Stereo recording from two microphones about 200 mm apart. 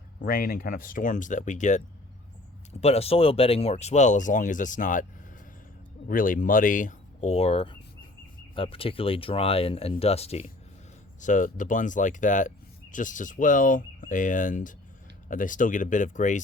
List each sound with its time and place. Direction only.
0.2 s speech: 45° left (ahead or behind)
2.8 s speech: 30° left (ahead or behind)
6.1 s speech: 45° left (ahead or behind)